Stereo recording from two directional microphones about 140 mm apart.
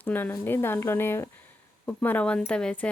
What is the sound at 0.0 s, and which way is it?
A woman's voice, 15° left (ahead or behind).